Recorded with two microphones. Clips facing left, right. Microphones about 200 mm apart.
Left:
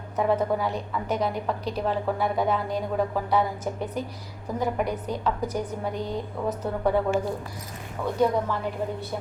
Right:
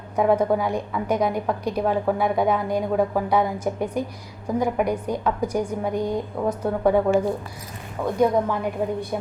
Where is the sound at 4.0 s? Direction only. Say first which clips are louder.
Right 5 dB; 10° right (ahead or behind).